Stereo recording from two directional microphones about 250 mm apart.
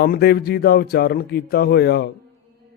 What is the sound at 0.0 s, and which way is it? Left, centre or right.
Speech, left.